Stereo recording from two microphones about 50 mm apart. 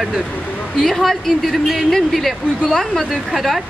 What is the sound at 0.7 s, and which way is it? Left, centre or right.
Speech, centre.